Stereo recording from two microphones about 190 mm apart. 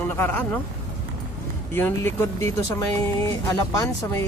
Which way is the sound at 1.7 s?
10° left (ahead or behind).